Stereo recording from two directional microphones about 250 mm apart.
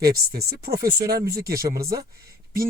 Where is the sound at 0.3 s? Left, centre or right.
Right.